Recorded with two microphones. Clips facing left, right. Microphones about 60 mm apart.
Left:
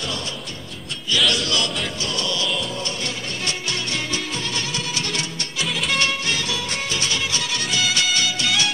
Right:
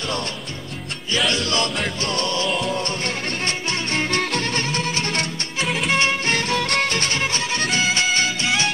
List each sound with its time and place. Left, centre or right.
1.1 s music: right
5.9 s music: right
6.3 s music: right